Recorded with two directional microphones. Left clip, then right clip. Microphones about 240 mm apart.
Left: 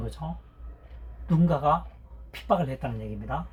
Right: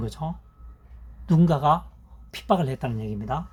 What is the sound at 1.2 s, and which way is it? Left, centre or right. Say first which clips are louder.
Speech: right 3 dB; right.